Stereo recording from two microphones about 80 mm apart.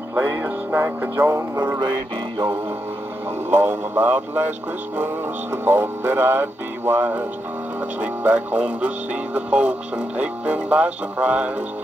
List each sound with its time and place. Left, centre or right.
0.1 s music: right
1.8 s music: right
3.4 s speech: right